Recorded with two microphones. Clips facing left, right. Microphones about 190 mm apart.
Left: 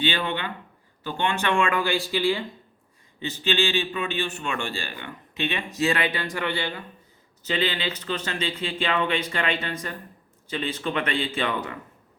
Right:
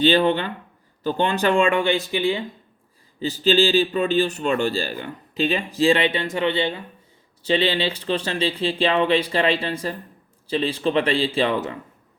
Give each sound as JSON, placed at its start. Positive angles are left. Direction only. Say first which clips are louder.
{"t": 0.0, "sound": "a man's voice", "louder": "right 9 dB", "side_deg": -40}
{"t": 3.2, "sound": "a man's voice", "louder": "right 7 dB", "side_deg": -35}